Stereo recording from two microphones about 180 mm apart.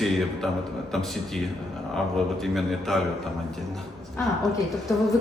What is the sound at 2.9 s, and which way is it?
Speech, centre (ahead or behind).